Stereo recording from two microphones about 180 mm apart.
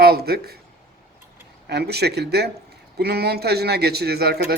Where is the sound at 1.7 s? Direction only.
65° right (ahead or behind).